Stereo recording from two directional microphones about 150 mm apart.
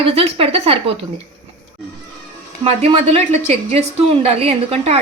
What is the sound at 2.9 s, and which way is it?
A woman's voice, 50° right (ahead or behind).